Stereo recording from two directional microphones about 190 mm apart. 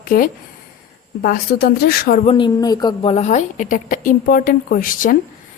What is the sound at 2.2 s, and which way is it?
A woman's voice, 25° left (ahead or behind).